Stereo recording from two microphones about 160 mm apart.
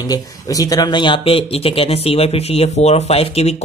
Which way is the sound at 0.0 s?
20° left (ahead or behind).